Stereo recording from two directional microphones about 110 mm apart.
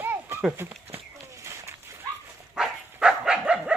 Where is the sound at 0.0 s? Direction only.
20° right (ahead or behind).